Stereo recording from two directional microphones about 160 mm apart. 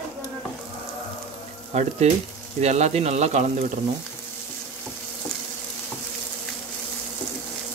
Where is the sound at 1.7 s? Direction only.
45° right (ahead or behind).